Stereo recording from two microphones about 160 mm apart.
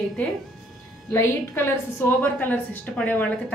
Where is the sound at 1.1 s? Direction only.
15° left (ahead or behind).